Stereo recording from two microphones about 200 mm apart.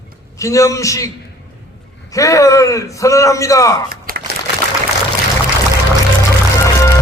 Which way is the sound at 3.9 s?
45° right (ahead or behind).